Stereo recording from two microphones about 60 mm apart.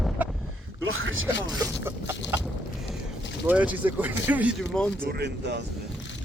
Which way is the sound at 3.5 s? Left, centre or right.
Right.